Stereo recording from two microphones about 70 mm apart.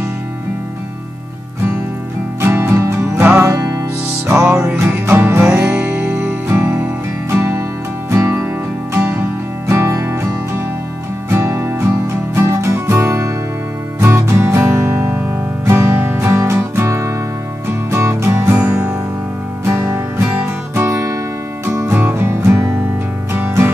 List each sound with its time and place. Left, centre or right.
2.4 s music: right
3.0 s music: right
3.5 s music: right
4.7 s music: right
5.6 s music: centre
7.2 s music: right
18.6 s music: right
19.6 s music: right
21.9 s music: right